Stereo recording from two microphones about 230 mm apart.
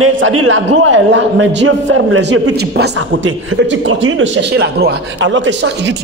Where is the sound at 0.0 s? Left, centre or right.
Right.